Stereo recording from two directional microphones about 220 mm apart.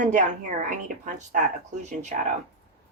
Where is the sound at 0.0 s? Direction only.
35° right (ahead or behind).